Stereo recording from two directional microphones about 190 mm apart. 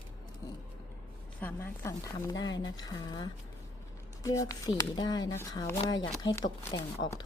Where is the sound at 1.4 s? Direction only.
10° left (ahead or behind).